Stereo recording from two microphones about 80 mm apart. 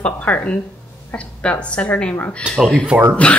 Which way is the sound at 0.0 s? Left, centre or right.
Centre.